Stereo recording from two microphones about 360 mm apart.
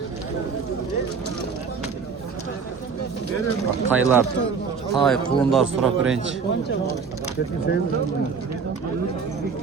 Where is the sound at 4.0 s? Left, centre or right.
Centre.